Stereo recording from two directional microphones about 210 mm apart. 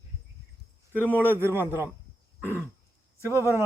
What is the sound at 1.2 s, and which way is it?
Speech, 10° right (ahead or behind).